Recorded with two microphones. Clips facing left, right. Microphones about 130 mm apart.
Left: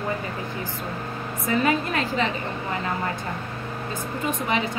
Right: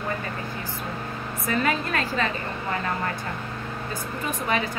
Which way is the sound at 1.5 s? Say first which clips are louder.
Left 2 dB; 20° left (ahead or behind).